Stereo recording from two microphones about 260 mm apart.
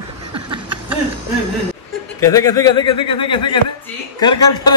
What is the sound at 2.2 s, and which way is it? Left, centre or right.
A man's voice, centre.